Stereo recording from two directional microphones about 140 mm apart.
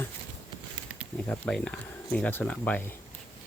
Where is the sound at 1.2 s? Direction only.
5° left (ahead or behind).